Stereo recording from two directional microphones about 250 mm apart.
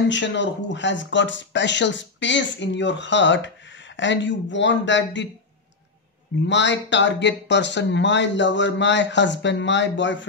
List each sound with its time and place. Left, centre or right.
0.1 s speech: left
6.4 s speech: left